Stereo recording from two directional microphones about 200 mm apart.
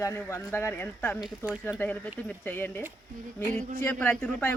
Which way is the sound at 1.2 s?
Centre (ahead or behind).